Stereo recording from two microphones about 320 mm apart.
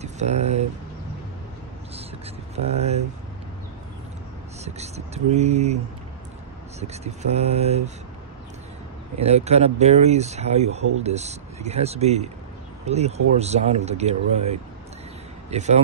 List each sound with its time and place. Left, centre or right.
0.0 s speech: right
2.5 s speech: centre
4.6 s speech: centre
6.8 s speech: centre
9.2 s speech: centre